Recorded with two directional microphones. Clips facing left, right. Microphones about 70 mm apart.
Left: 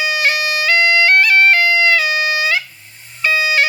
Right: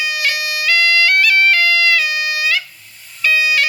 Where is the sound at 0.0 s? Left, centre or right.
Left.